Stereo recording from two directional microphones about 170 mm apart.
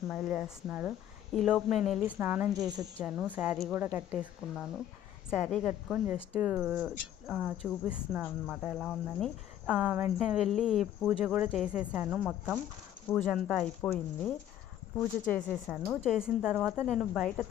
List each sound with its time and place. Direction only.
0.1 s speech: 5° right (ahead or behind)
2.0 s speech: 10° right (ahead or behind)
2.5 s speech: 20° right (ahead or behind)
3.0 s speech: 5° right (ahead or behind)
16.1 s speech: 5° right (ahead or behind)